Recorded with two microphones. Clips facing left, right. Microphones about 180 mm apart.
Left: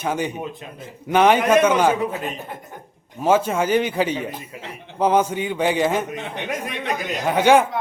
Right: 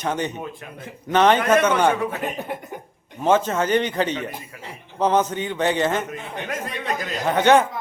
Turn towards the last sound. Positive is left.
turn(degrees=10)  # may be behind; listen again after turning